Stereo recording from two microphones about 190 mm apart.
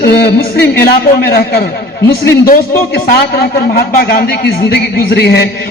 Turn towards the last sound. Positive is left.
turn(degrees=60)  # may be behind; listen again after turning